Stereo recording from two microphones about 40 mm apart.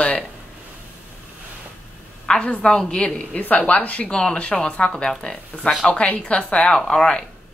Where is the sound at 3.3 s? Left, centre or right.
Left.